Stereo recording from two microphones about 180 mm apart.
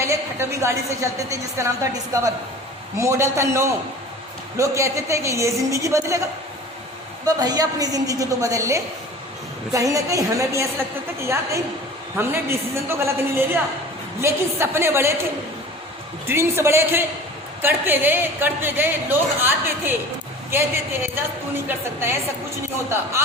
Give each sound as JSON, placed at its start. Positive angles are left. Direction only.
{"t": 0.0, "sound": "a woman's voice", "side_deg": -15}
{"t": 7.3, "sound": "a woman's voice", "side_deg": -20}